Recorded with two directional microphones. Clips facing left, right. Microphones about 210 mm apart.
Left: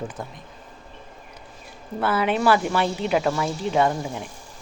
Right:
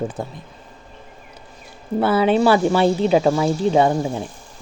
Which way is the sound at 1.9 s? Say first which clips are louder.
Right 6 dB; 30° right (ahead or behind).